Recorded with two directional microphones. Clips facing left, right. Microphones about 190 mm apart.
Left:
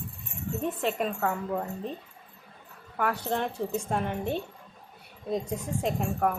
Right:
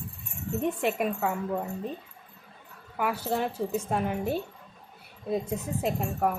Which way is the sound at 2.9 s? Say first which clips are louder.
Even; 5° right (ahead or behind).